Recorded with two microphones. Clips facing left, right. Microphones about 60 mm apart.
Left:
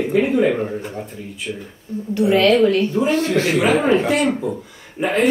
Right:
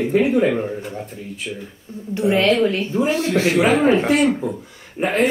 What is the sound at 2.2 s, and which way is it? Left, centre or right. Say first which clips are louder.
Speech: left 2 dB; right.